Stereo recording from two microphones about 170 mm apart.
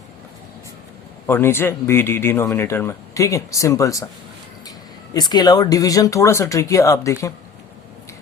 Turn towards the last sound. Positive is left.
turn(degrees=20)  # may be behind; listen again after turning